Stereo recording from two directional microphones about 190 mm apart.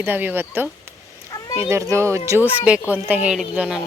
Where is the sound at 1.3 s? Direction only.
15° left (ahead or behind).